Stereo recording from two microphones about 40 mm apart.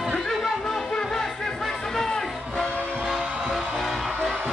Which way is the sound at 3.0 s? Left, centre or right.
Centre.